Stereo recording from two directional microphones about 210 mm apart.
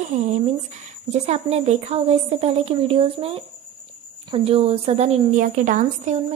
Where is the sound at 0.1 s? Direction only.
35° right (ahead or behind).